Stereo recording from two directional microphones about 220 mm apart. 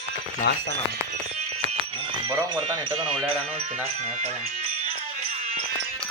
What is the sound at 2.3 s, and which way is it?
Speech, 20° right (ahead or behind).